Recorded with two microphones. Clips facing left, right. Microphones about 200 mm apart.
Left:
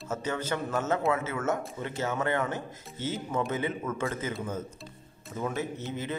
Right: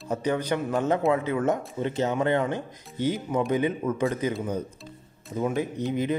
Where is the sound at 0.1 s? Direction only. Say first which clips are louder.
Right 6 dB; 15° right (ahead or behind).